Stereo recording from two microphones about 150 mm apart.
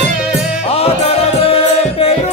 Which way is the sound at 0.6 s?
40° left (ahead or behind).